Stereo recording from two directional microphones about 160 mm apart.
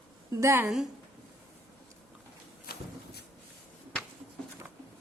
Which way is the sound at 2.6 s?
75° left (ahead or behind).